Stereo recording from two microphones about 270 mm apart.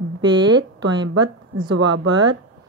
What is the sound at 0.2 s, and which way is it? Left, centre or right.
Speech, right.